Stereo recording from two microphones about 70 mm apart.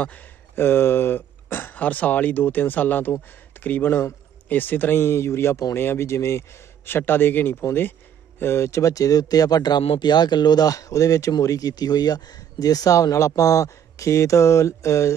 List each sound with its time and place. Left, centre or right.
0.0 s speech: left
0.6 s speech: left